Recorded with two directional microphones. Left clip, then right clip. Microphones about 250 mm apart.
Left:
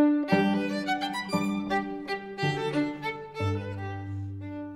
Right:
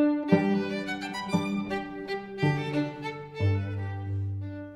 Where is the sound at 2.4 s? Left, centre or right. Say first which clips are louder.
Left 1 dB; left.